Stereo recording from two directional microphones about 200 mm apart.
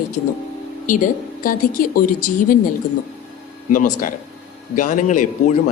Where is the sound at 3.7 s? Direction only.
40° left (ahead or behind).